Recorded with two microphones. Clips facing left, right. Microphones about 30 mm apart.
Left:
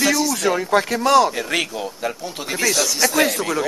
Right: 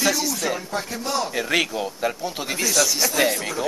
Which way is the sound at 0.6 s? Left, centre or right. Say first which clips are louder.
Left 10 dB; left.